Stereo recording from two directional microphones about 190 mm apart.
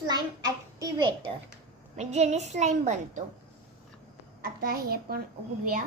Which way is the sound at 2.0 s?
35° right (ahead or behind).